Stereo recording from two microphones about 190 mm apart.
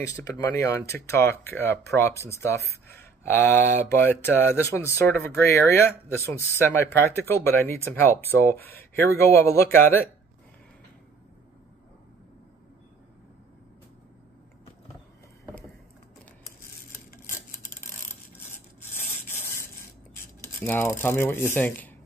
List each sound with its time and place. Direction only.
0.0 s speech: 15° left (ahead or behind)
19.2 s rub: 15° left (ahead or behind)
20.4 s speech: 10° left (ahead or behind)